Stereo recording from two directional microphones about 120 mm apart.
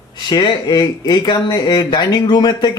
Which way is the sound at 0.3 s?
35° left (ahead or behind).